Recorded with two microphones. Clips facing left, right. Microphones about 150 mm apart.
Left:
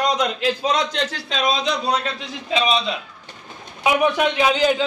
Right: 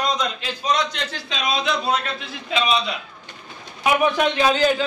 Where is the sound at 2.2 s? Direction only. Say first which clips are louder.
Left 2 dB; 30° left (ahead or behind).